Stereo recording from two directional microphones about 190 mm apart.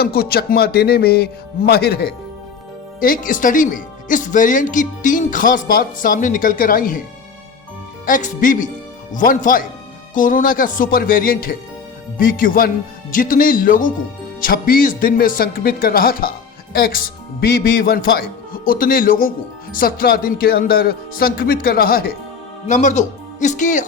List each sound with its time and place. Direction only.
0.0 s speech: 50° left (ahead or behind)
3.0 s speech: 45° left (ahead or behind)
8.0 s speech: 45° left (ahead or behind)
22.6 s speech: 40° left (ahead or behind)